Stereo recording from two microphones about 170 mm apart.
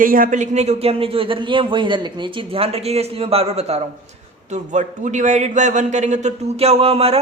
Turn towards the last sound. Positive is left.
turn(degrees=-35)  # may be behind; listen again after turning